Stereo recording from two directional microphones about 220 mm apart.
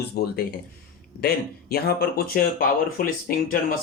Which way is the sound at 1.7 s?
45° left (ahead or behind).